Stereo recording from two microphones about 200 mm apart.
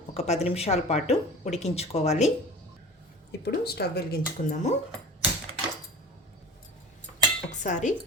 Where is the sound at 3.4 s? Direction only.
55° left (ahead or behind).